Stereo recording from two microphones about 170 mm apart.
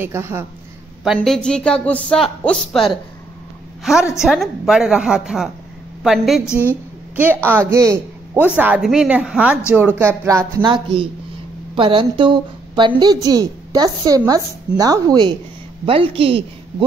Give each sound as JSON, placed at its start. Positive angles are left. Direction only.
{"t": 0.0, "sound": "a woman's voice", "side_deg": -15}
{"t": 1.0, "sound": "speech", "side_deg": 0}
{"t": 6.4, "sound": "a woman's voice", "side_deg": 15}
{"t": 7.4, "sound": "a woman's voice", "side_deg": -15}